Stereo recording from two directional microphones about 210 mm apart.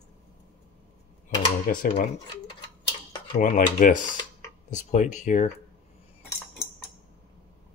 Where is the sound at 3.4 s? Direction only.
40° left (ahead or behind).